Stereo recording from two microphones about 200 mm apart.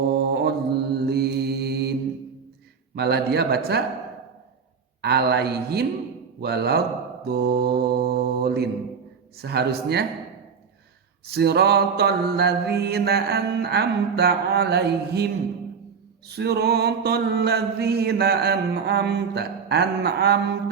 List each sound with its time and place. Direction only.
0.0 s mantra: 55° right (ahead or behind)
2.9 s a man's voice: 55° right (ahead or behind)
5.0 s a man's voice: 55° right (ahead or behind)
6.4 s mantra: 55° right (ahead or behind)
11.3 s mantra: 55° right (ahead or behind)
16.3 s mantra: 55° right (ahead or behind)